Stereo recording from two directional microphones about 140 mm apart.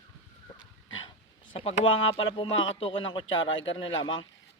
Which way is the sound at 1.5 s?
45° left (ahead or behind).